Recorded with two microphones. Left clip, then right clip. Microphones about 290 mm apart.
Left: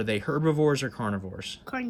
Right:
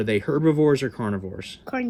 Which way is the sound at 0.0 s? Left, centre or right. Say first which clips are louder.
Right 5 dB; left.